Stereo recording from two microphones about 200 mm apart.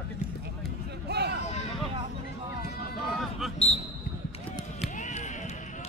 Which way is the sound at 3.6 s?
30° left (ahead or behind).